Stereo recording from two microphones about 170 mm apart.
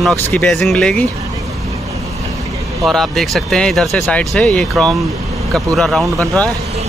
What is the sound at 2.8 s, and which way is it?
Speech, centre (ahead or behind).